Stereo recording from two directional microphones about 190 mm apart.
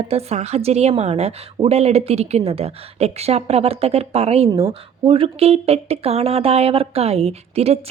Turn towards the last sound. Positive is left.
turn(degrees=-30)  # may be behind; listen again after turning